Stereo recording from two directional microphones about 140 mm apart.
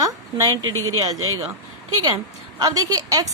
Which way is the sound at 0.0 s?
25° right (ahead or behind).